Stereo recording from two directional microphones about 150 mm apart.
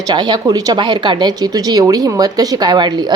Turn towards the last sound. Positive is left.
turn(degrees=-30)  # may be behind; listen again after turning